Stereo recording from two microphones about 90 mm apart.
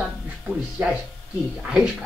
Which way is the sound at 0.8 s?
25° right (ahead or behind).